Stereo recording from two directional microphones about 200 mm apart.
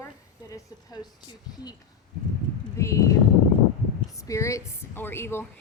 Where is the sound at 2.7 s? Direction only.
15° left (ahead or behind).